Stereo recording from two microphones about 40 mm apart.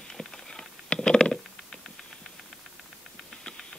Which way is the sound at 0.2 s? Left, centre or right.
Left.